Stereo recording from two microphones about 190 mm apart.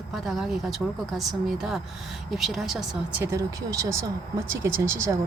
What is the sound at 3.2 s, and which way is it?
Speech, 15° right (ahead or behind).